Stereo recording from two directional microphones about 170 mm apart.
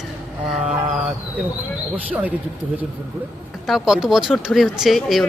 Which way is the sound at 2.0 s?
10° right (ahead or behind).